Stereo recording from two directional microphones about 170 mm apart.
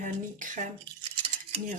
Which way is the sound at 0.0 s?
50° right (ahead or behind).